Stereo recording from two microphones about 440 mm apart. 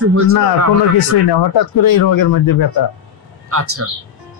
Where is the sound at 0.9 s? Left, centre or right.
Left.